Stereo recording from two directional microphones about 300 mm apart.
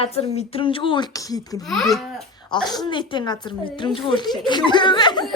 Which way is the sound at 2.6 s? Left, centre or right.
Centre.